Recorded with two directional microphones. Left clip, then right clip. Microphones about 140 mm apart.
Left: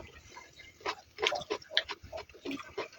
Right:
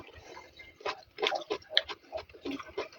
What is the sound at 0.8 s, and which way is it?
Pig, 20° left (ahead or behind).